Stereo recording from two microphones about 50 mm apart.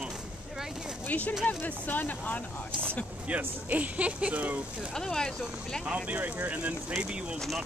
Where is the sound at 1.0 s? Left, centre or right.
Left.